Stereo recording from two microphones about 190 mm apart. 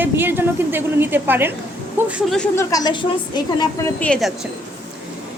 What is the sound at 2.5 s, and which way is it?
A woman's voice, 20° left (ahead or behind).